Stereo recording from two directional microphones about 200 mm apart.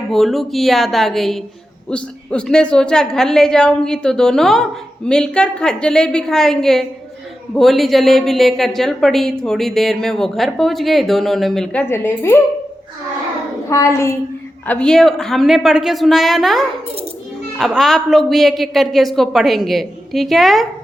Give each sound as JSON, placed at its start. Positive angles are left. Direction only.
{"t": 0.1, "sound": "a woman's voice", "side_deg": 0}
{"t": 13.7, "sound": "a woman's voice", "side_deg": 15}